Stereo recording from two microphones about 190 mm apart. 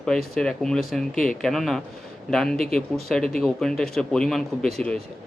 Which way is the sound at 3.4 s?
5° left (ahead or behind).